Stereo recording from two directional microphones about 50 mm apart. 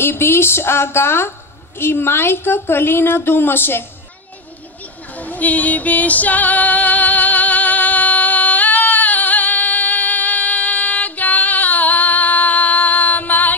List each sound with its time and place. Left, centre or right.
0.0 s a woman's voice: left
5.1 s music: left